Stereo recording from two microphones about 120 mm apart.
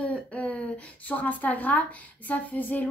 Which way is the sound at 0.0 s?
10° left (ahead or behind).